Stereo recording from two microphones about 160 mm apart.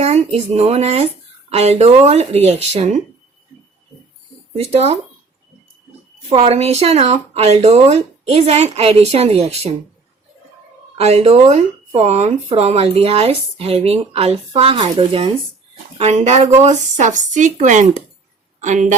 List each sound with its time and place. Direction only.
0.0 s speech: 40° right (ahead or behind)
4.6 s speech: 40° right (ahead or behind)
6.2 s speech: 40° right (ahead or behind)
10.9 s speech: 40° right (ahead or behind)